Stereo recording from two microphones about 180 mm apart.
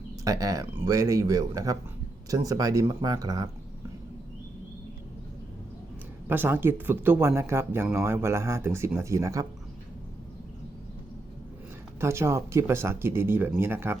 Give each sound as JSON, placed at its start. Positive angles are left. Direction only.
{"t": 0.3, "sound": "speech", "side_deg": -20}
{"t": 6.2, "sound": "speech", "side_deg": -10}
{"t": 11.9, "sound": "speech", "side_deg": -15}